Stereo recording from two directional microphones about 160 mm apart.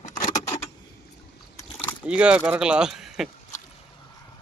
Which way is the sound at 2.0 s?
5° right (ahead or behind).